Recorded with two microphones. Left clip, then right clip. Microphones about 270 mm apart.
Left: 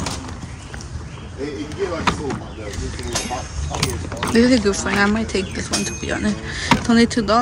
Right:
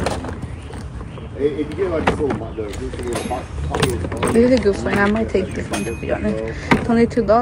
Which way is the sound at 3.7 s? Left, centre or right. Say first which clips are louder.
Right 4 dB; centre.